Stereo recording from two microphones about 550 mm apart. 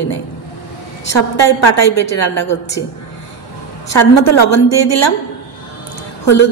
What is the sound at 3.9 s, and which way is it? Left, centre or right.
Speech, left.